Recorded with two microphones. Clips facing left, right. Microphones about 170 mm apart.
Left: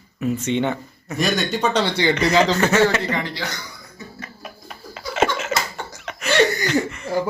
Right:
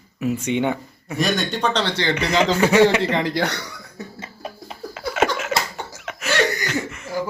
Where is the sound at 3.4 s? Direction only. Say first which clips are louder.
Right 7 dB; 65° right (ahead or behind).